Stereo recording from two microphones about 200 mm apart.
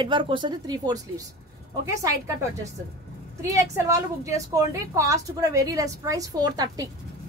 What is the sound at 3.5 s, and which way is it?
A woman's voice, 15° right (ahead or behind).